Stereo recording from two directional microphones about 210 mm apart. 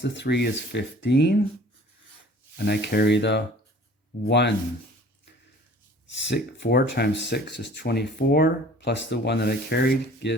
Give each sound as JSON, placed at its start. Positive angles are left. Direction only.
{"t": 0.0, "sound": "speech", "side_deg": 55}
{"t": 2.6, "sound": "speech", "side_deg": 50}
{"t": 6.1, "sound": "speech", "side_deg": 55}